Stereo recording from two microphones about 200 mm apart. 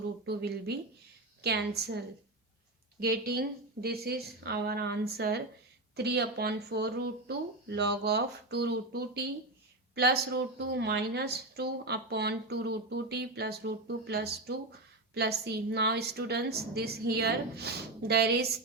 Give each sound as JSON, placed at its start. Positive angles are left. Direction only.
{"t": 0.3, "sound": "a woman's voice", "side_deg": -55}
{"t": 3.0, "sound": "a woman's voice", "side_deg": -50}